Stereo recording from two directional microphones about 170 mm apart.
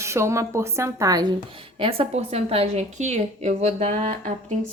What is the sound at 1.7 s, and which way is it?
A woman's voice, 30° right (ahead or behind).